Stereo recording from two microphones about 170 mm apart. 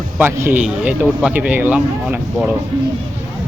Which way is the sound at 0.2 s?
15° right (ahead or behind).